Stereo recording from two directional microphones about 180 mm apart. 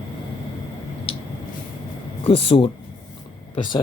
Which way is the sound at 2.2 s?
30° left (ahead or behind).